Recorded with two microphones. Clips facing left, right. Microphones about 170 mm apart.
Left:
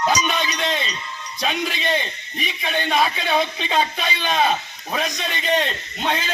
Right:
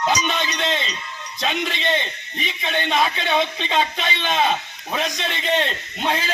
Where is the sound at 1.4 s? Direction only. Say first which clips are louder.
Even; centre (ahead or behind).